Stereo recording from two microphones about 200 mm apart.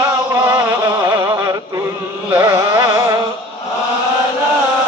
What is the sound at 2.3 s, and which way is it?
Carnatic music, 15° right (ahead or behind).